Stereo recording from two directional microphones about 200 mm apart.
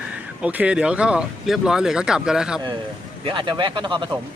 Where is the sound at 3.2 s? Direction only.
25° right (ahead or behind).